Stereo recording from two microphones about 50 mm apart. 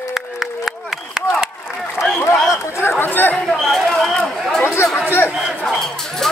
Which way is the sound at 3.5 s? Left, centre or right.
Centre.